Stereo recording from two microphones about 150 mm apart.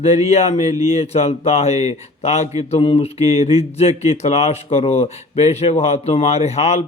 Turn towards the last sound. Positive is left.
turn(degrees=45)  # may be behind; listen again after turning